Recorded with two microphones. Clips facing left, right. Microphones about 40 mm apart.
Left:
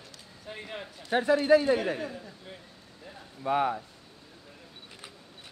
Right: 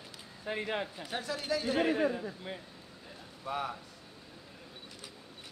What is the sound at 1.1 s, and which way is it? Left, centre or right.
Speech, left.